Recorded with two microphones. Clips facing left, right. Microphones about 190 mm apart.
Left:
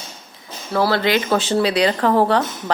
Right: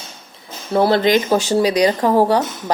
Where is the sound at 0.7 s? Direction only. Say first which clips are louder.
Right 4 dB; 20° right (ahead or behind).